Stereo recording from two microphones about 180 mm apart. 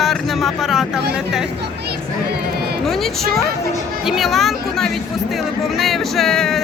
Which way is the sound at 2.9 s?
Centre (ahead or behind).